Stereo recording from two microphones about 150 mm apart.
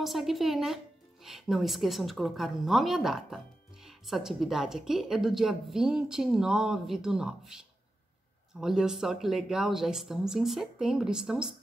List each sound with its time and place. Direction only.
0.0 s a woman's voice: centre (ahead or behind)